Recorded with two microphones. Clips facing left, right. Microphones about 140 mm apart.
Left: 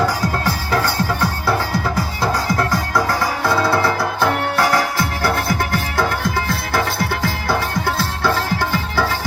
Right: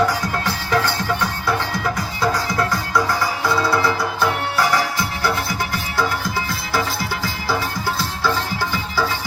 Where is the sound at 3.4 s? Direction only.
55° left (ahead or behind).